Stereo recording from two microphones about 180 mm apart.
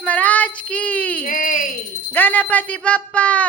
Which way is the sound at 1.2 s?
50° left (ahead or behind).